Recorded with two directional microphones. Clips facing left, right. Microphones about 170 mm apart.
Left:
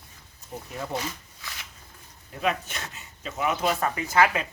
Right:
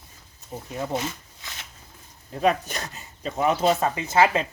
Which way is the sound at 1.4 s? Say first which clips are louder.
Even; 20° right (ahead or behind).